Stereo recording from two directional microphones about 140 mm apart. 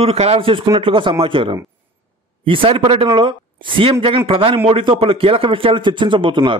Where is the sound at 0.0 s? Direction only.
45° right (ahead or behind).